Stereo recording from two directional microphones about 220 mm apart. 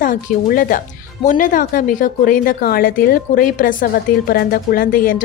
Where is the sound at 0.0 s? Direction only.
40° left (ahead or behind).